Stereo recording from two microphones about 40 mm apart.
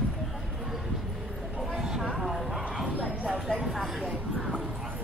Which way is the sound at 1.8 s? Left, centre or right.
Centre.